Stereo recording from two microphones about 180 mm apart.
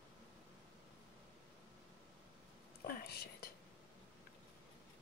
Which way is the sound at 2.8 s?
65° left (ahead or behind).